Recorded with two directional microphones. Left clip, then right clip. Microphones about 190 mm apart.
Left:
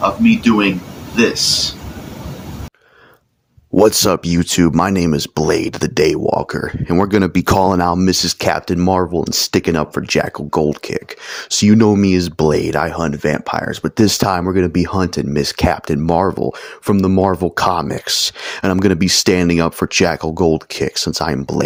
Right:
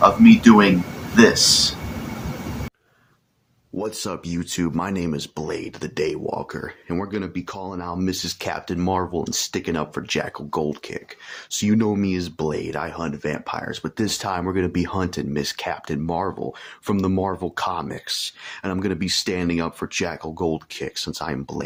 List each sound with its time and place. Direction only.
0.0 s speech: 5° right (ahead or behind)
3.8 s speech: 55° left (ahead or behind)
7.9 s speech: 45° left (ahead or behind)